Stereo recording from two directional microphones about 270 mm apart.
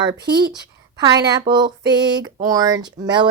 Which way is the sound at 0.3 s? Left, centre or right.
Right.